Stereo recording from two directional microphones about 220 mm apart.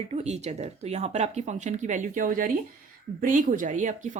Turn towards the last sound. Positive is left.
turn(degrees=-35)  # may be behind; listen again after turning